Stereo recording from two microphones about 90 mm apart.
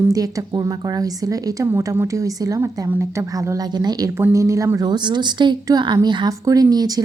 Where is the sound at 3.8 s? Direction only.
50° right (ahead or behind).